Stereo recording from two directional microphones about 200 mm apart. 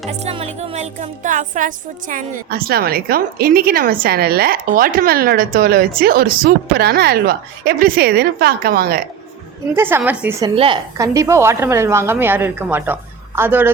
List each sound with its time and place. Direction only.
0.1 s speech: 30° right (ahead or behind); by 9.0 s 50° right (ahead or behind)
9.7 s a woman's voice: 10° right (ahead or behind)
10.4 s a woman's voice: 25° right (ahead or behind)
10.9 s a woman's voice: 15° right (ahead or behind)